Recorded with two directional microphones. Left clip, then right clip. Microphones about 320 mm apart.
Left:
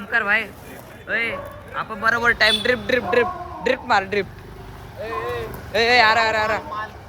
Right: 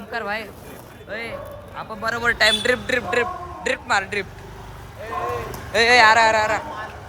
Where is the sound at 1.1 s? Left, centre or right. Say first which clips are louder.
Left 8 dB; centre.